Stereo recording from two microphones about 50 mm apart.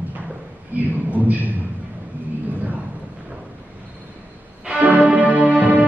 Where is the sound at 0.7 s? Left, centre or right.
Right.